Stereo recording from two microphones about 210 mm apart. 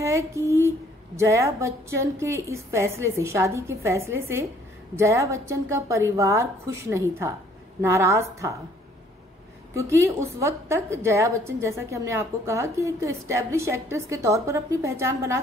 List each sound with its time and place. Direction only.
0.0 s a woman's voice: 15° right (ahead or behind)
9.8 s a woman's voice: 15° right (ahead or behind)